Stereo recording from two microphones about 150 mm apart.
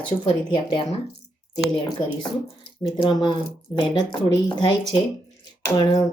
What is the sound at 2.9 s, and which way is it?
Speech, 30° left (ahead or behind).